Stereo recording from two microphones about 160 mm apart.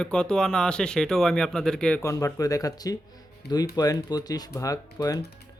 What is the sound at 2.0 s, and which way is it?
Speech, 20° left (ahead or behind).